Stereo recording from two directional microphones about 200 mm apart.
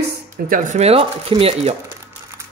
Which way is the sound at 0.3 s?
45° right (ahead or behind).